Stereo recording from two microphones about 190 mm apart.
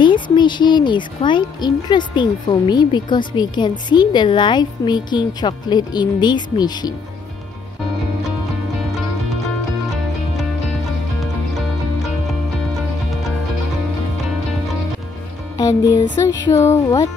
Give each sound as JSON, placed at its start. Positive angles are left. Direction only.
{"t": 0.0, "sound": "speech", "side_deg": 25}
{"t": 15.5, "sound": "speech", "side_deg": 20}